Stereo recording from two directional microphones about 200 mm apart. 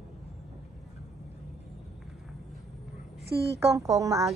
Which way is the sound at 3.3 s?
55° right (ahead or behind).